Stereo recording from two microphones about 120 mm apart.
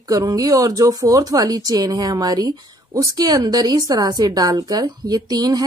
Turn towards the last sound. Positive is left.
turn(degrees=-35)  # may be behind; listen again after turning